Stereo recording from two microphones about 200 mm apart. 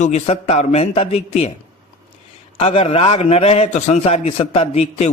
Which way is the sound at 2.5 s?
30° left (ahead or behind).